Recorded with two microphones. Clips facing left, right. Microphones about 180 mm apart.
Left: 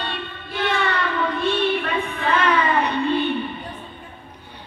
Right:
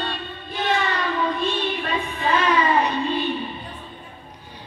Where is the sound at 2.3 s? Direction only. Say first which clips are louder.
Even; 60° left (ahead or behind).